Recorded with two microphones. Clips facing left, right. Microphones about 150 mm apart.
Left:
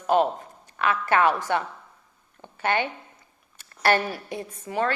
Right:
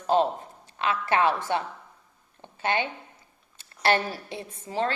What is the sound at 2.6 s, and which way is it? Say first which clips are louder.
Speech: left 2 dB; 20° right (ahead or behind).